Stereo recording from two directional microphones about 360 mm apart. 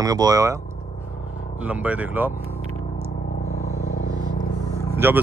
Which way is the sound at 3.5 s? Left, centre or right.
Left.